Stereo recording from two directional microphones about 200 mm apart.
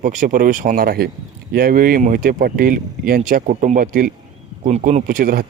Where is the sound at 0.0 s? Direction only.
40° right (ahead or behind).